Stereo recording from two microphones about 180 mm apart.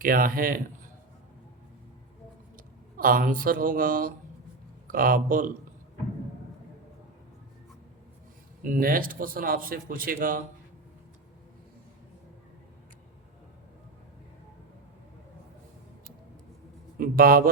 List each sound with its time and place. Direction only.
0.0 s a man's voice: 50° right (ahead or behind)
3.0 s a man's voice: 50° right (ahead or behind)
8.6 s a man's voice: 50° right (ahead or behind)
17.0 s a man's voice: 55° right (ahead or behind)